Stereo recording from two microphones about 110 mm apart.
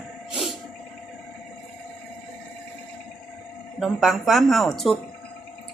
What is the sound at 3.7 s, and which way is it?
Speech, 5° right (ahead or behind).